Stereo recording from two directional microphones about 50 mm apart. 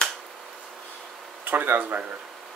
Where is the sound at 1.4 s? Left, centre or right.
Right.